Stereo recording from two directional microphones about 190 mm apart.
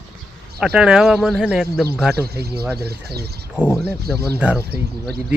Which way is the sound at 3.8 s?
55° right (ahead or behind).